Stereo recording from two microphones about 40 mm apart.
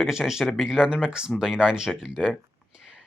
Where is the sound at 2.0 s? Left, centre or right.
Centre.